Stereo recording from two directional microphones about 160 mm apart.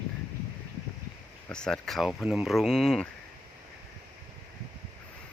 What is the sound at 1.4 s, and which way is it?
Speech, 5° left (ahead or behind).